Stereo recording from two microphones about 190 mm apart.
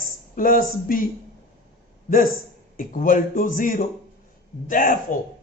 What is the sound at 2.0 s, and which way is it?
A man's voice, 50° left (ahead or behind).